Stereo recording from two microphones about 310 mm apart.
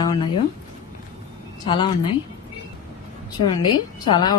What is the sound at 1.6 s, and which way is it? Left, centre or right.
Speech, centre.